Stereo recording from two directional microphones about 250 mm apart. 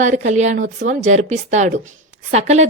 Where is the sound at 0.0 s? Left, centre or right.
Right.